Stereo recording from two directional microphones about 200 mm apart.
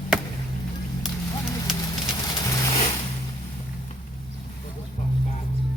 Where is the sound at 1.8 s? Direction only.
20° left (ahead or behind).